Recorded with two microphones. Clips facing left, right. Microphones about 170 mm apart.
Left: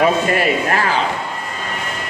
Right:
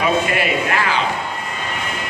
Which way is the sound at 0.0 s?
40° left (ahead or behind).